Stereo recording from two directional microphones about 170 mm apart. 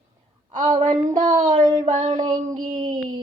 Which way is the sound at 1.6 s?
25° right (ahead or behind).